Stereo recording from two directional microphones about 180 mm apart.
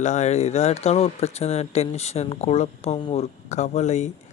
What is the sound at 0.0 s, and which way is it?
Speech, 40° left (ahead or behind).